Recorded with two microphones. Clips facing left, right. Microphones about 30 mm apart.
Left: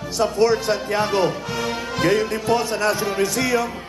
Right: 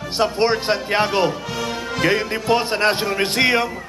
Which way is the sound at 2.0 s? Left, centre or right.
Right.